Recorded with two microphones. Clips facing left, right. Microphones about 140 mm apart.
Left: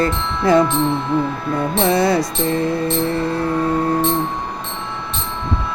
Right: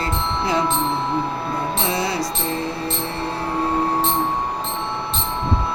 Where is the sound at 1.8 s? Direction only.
50° left (ahead or behind).